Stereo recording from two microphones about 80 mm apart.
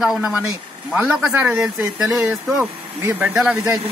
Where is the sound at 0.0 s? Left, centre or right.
Centre.